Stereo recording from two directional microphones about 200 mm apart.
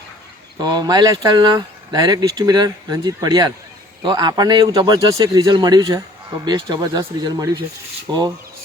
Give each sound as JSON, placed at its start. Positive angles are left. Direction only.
{"t": 0.6, "sound": "speech", "side_deg": -20}